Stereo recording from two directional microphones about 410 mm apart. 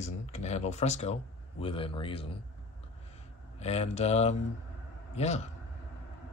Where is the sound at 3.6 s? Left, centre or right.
Centre.